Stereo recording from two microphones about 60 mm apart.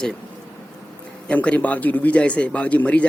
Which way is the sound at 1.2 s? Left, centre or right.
Left.